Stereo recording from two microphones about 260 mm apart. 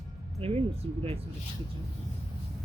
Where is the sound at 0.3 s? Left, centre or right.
Right.